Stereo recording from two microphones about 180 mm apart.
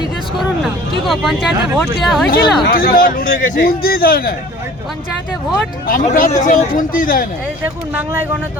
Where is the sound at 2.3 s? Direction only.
60° left (ahead or behind).